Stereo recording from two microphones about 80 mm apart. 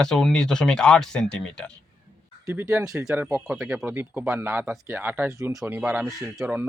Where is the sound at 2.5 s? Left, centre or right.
Right.